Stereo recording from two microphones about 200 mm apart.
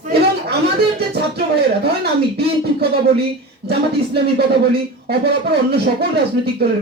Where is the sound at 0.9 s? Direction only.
55° right (ahead or behind).